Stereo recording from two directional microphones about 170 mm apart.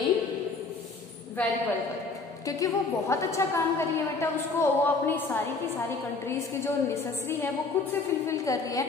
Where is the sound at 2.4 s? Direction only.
20° left (ahead or behind).